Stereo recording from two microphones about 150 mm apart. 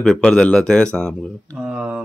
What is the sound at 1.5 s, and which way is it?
Speech, 5° right (ahead or behind).